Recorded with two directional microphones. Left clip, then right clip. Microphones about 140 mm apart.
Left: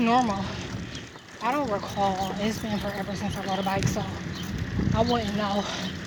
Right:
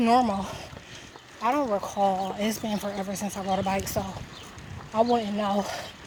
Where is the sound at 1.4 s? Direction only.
35° right (ahead or behind).